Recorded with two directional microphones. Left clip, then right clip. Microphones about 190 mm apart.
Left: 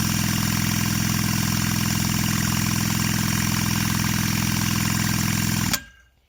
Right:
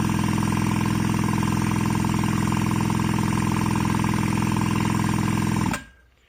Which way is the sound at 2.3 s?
30° left (ahead or behind).